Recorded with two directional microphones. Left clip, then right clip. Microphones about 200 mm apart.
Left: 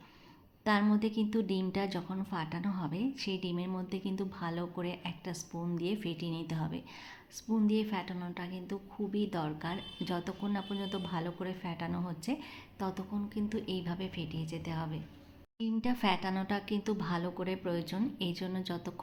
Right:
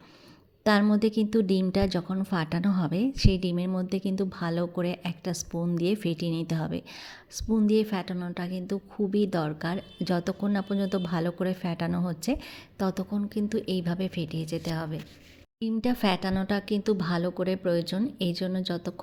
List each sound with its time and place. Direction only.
0.6 s a woman's voice: 40° right (ahead or behind)